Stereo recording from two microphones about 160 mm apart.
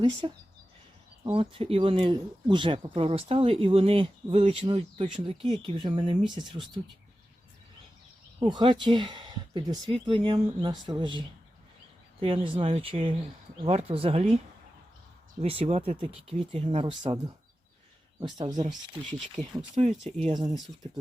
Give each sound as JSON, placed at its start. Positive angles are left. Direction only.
{"t": 0.2, "sound": "speech", "side_deg": -30}
{"t": 8.4, "sound": "speech", "side_deg": -30}
{"t": 12.2, "sound": "speech", "side_deg": -35}
{"t": 15.4, "sound": "speech", "side_deg": -40}
{"t": 18.3, "sound": "speech", "side_deg": -25}
{"t": 19.7, "sound": "speech", "side_deg": -45}
{"t": 20.2, "sound": "speech", "side_deg": -25}